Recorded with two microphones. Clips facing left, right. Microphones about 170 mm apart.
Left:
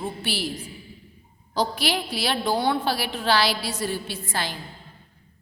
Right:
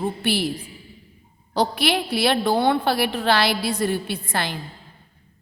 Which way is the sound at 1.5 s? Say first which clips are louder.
Right 4 dB; 65° right (ahead or behind).